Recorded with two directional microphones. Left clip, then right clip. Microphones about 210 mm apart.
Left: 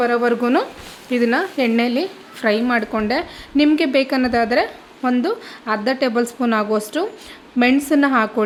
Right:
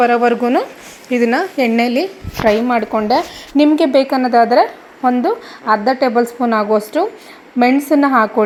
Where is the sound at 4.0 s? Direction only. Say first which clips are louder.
Right 6 dB; 25° left (ahead or behind).